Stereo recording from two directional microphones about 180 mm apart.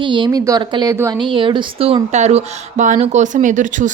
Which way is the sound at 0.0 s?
25° right (ahead or behind).